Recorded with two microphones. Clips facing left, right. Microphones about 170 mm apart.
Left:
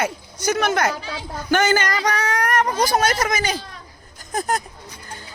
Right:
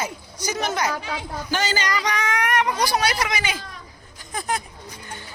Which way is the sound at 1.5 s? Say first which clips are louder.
Left 6 dB; 55° left (ahead or behind).